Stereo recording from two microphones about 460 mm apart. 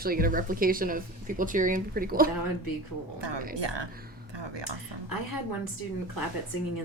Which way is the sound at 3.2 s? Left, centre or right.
Right.